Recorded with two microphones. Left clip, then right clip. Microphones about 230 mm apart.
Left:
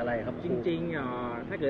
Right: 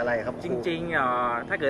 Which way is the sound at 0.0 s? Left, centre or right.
Right.